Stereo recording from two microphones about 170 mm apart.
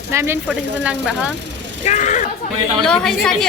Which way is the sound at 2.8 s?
5° left (ahead or behind).